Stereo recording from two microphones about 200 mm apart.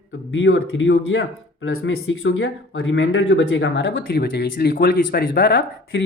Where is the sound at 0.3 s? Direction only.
80° left.